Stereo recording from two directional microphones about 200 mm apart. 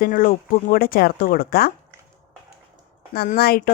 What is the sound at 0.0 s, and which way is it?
A woman's voice, 45° left (ahead or behind).